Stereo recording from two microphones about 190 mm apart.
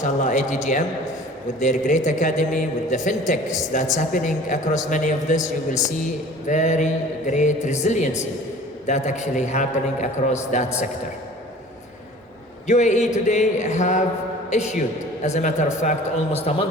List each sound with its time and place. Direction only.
0.0 s a man's voice: 40° left (ahead or behind)
12.6 s a man's voice: 40° left (ahead or behind)